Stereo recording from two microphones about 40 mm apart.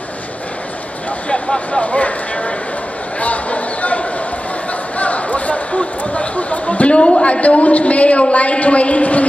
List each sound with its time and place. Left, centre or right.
1.7 s speech: left
3.2 s a sound: left
4.9 s speech: left